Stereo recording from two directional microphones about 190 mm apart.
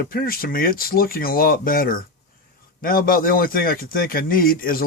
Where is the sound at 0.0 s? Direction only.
50° left (ahead or behind).